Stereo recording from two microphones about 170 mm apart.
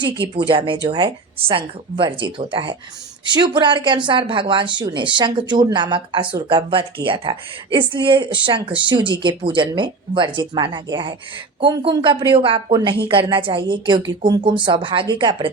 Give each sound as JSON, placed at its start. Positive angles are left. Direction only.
{"t": 0.3, "sound": "a woman's voice", "side_deg": -30}